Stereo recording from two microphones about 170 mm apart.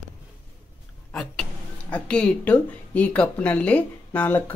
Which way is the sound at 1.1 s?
5° left (ahead or behind).